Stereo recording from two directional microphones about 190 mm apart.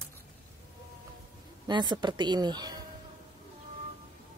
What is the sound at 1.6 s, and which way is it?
A woman's voice, 25° right (ahead or behind).